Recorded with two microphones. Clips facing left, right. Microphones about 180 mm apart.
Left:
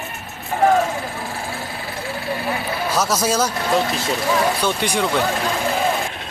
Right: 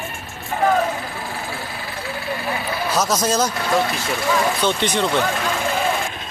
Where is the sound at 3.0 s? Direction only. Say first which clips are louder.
Even; 10° left (ahead or behind).